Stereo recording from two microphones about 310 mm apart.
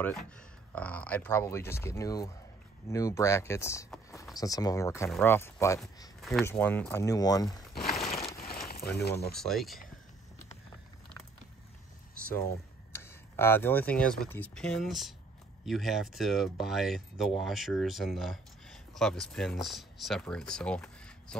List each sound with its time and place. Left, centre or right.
0.7 s speech: centre
7.4 s speech: centre
8.0 s a sound: centre
9.3 s speech: centre
12.4 s speech: centre